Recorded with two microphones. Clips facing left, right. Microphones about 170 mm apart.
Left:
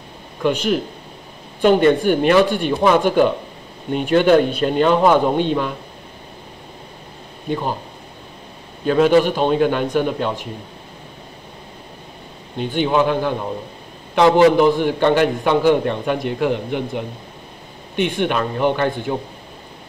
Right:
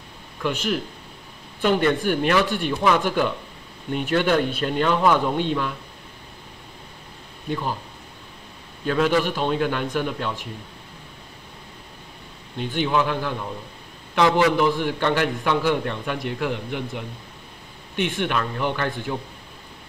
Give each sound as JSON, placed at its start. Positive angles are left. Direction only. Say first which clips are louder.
{"t": 1.6, "sound": "a man's voice", "louder": "left 7 dB", "side_deg": 25}
{"t": 7.4, "sound": "a man's voice", "louder": "left 4 dB", "side_deg": 25}
{"t": 8.8, "sound": "a man's voice", "louder": "left 7 dB", "side_deg": 25}
{"t": 12.5, "sound": "a man's voice", "louder": "left 5 dB", "side_deg": 20}